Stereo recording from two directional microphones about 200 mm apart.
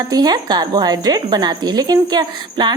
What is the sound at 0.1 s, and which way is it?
Speech, 20° right (ahead or behind).